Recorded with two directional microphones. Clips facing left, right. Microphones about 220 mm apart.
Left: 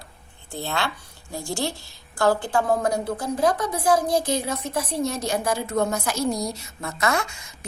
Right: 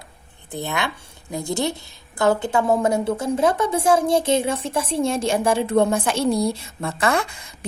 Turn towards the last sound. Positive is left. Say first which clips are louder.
# right 3 dB
turn(degrees=-30)  # may be behind; listen again after turning